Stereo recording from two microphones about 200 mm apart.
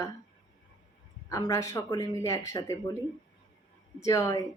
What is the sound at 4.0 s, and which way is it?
Speech, 15° left (ahead or behind).